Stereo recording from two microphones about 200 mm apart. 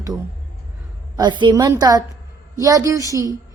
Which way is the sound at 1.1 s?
20° right (ahead or behind).